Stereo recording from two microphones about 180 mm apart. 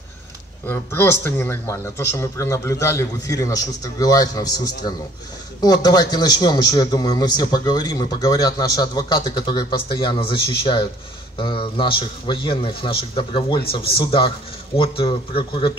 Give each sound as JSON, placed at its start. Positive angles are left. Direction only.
{"t": 0.7, "sound": "a man's voice", "side_deg": 10}